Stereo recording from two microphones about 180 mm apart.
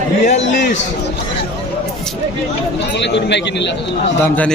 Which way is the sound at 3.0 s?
75° left (ahead or behind).